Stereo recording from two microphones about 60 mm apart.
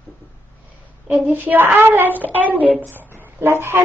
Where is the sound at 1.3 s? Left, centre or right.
Right.